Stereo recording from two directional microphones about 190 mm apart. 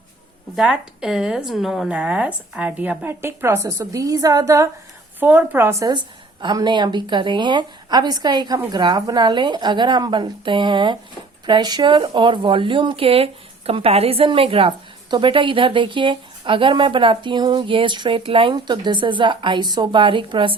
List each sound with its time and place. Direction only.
0.5 s speech: 5° right (ahead or behind); by 20.6 s 25° right (ahead or behind)